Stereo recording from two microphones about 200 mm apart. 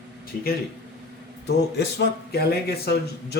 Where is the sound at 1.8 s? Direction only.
55° left (ahead or behind).